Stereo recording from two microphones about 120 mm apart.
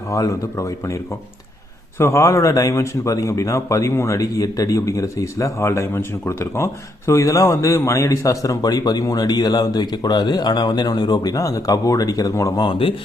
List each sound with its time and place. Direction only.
0.1 s speech: 25° left (ahead or behind)
2.0 s speech: 25° left (ahead or behind)